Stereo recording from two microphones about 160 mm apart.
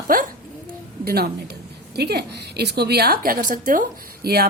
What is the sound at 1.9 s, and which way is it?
A woman's voice, 90° right.